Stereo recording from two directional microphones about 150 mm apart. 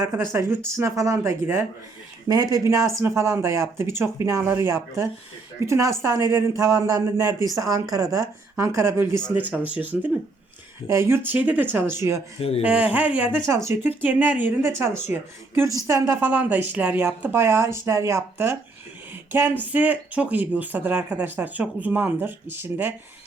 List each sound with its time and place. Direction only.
0.0 s a man's voice: 20° right (ahead or behind)
12.4 s speech: 40° left (ahead or behind)
12.6 s speech: 10° right (ahead or behind)